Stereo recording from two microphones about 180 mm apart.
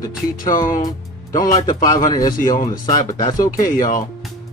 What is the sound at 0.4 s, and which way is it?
Speech, 50° left (ahead or behind).